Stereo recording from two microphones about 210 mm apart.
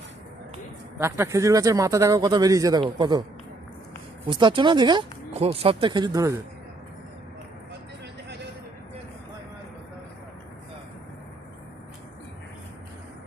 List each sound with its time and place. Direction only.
0.9 s speech: 10° right (ahead or behind)
4.3 s speech: 20° right (ahead or behind)